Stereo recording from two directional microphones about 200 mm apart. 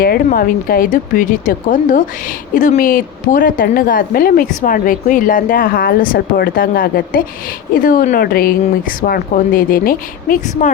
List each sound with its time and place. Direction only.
0.0 s speech: 45° left (ahead or behind)